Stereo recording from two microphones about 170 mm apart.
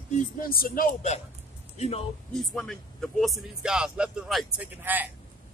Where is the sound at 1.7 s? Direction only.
35° left (ahead or behind).